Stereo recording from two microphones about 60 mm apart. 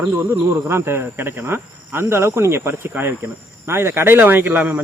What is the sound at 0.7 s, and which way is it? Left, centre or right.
Cricket, right.